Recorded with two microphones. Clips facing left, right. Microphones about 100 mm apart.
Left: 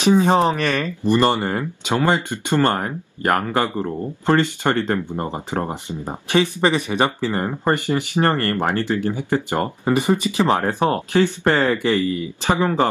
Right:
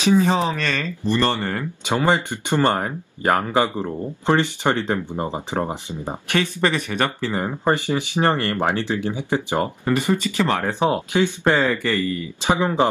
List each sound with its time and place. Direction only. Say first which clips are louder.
0.0 s speech: left 3 dB; 20° left (ahead or behind)
1.9 s speech: even; 15° right (ahead or behind)
6.3 s speech: left 3 dB; 20° left (ahead or behind)
7.3 s speech: even; 10° right (ahead or behind)
9.8 s speech: left 4 dB; 15° left (ahead or behind)
10.8 s speech: left 1 dB; 15° right (ahead or behind)
11.5 s speech: left 2 dB; 10° left (ahead or behind)
12.4 s speech: left 1 dB; 15° right (ahead or behind)